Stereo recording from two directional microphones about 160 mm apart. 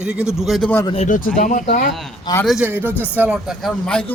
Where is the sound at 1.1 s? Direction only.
55° left (ahead or behind).